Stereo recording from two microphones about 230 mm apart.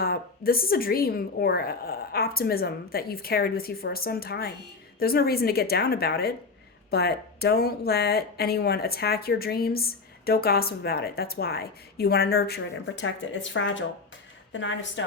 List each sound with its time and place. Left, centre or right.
0.0 s a woman's voice: left